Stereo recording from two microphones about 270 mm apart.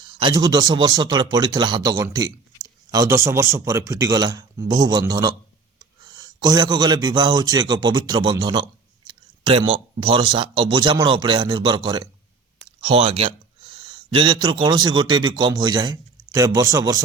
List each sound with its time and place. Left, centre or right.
0.0 s a man's voice: centre